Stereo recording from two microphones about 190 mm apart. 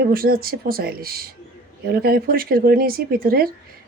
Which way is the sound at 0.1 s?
50° right (ahead or behind).